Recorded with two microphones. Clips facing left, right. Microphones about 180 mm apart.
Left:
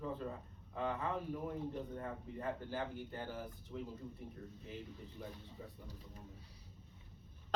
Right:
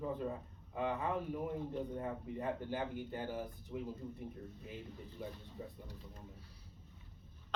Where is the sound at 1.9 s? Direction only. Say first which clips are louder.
Right 4 dB; 15° right (ahead or behind).